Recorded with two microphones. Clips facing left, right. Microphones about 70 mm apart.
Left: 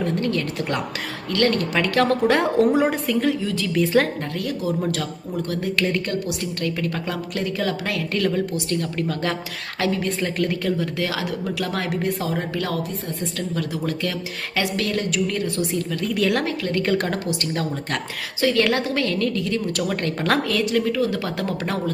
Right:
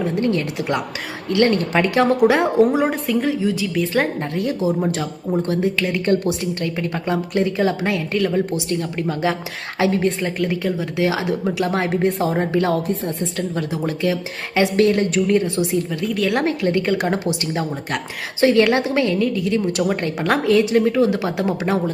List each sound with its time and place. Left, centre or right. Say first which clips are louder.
0.2 s a woman's voice: right 3 dB; right
2.3 s a woman's voice: right 2 dB; centre
4.4 s a woman's voice: right 5 dB; right
15.7 s a woman's voice: right 3 dB; centre
16.0 s a woman's voice: left 2 dB; centre
16.4 s a woman's voice: right 5 dB; right
16.8 s a woman's voice: right 1 dB; centre
17.1 s a woman's voice: right 4 dB; right
19.5 s a woman's voice: right 4 dB; right